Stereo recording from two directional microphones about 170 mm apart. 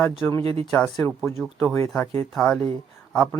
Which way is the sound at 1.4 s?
Centre (ahead or behind).